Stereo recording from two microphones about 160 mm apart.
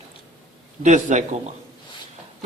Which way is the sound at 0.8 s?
50° right (ahead or behind).